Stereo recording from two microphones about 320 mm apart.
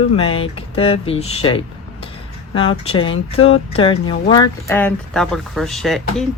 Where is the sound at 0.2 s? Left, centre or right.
Centre.